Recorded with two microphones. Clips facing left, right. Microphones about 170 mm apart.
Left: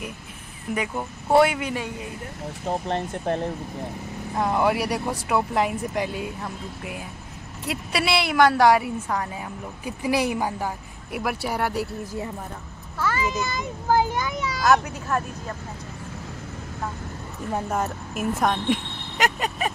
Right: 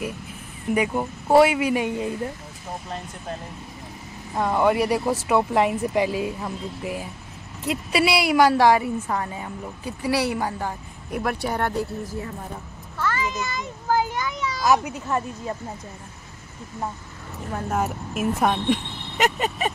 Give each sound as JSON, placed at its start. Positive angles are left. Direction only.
{"t": 0.7, "sound": "speech", "side_deg": -5}
{"t": 2.6, "sound": "speech", "side_deg": 70}
{"t": 4.4, "sound": "speech", "side_deg": 0}
{"t": 9.8, "sound": "speech", "side_deg": 15}
{"t": 13.0, "sound": "a child's voice", "side_deg": 10}
{"t": 14.6, "sound": "speech", "side_deg": -5}
{"t": 17.6, "sound": "speech", "side_deg": -5}
{"t": 18.7, "sound": "a sound", "side_deg": 0}